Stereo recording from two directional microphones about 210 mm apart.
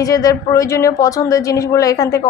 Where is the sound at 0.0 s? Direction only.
15° left (ahead or behind).